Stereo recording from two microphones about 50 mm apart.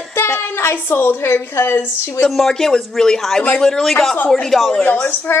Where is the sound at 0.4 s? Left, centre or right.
Left.